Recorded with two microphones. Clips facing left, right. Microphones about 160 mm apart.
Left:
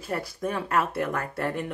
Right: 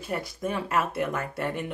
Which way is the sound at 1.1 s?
25° right (ahead or behind).